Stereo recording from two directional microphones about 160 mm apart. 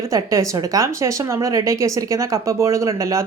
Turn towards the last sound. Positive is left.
turn(degrees=-20)  # may be behind; listen again after turning